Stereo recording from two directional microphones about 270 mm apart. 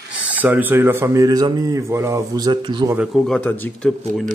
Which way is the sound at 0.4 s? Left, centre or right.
Centre.